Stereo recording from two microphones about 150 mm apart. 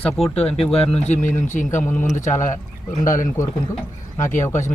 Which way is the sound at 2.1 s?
55° left (ahead or behind).